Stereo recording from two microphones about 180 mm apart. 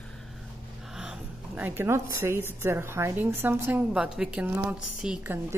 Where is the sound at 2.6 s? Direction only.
15° right (ahead or behind).